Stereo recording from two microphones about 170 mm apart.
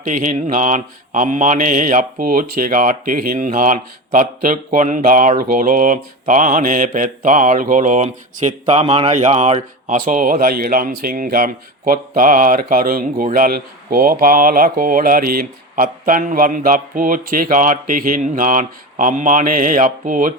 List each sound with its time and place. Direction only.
0.0 s speech: 50° right (ahead or behind)
8.8 s speech: 35° right (ahead or behind); by 20.4 s 50° right (ahead or behind)